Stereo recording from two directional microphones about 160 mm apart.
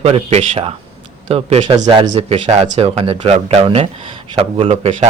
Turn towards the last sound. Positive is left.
turn(degrees=-40)  # may be behind; listen again after turning